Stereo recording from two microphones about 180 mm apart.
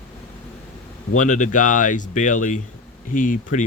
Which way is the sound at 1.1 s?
45° left (ahead or behind).